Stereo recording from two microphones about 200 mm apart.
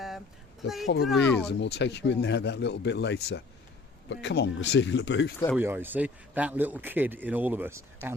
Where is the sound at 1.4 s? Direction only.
55° left (ahead or behind).